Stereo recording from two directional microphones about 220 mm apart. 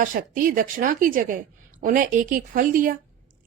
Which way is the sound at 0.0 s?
40° right (ahead or behind).